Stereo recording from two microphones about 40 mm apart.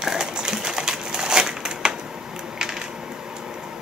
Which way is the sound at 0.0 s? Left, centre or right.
Centre.